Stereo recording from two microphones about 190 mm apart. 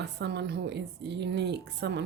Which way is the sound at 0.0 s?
65° right (ahead or behind).